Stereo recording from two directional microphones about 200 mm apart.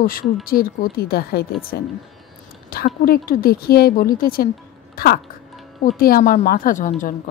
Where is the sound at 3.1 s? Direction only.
45° left (ahead or behind).